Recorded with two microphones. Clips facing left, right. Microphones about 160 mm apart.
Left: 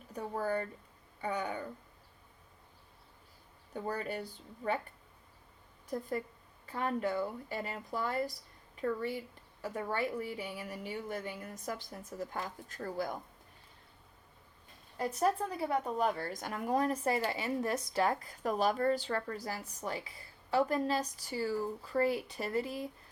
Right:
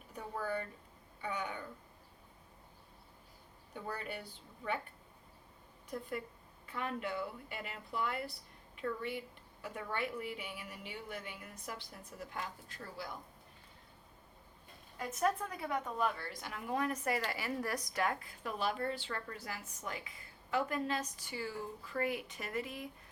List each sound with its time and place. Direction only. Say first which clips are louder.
0.1 s a woman's voice: left 5 dB; 40° left (ahead or behind)
3.8 s a woman's voice: left 6 dB; 40° left (ahead or behind)
5.9 s a woman's voice: left 5 dB; 40° left (ahead or behind)
14.9 s a woman's voice: left 3 dB; 35° left (ahead or behind)